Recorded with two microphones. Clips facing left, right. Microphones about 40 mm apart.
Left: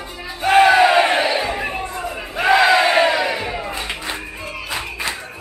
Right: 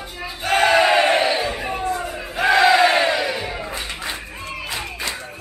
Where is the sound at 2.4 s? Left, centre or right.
Centre.